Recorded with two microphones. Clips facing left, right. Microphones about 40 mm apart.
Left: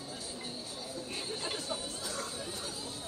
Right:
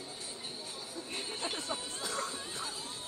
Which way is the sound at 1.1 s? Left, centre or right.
Right.